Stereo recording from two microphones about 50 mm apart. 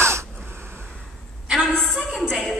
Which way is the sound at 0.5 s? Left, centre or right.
Right.